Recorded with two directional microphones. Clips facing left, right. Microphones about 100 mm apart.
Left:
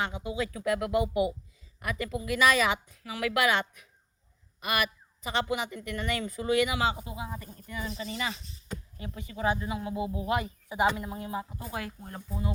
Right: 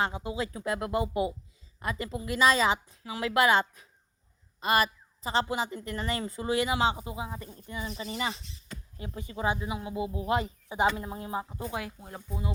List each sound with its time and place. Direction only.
0.0 s a woman's voice: 30° right (ahead or behind); by 12.2 s 15° right (ahead or behind)